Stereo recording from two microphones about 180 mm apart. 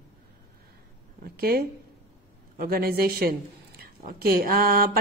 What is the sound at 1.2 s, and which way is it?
A woman's voice, 60° right (ahead or behind).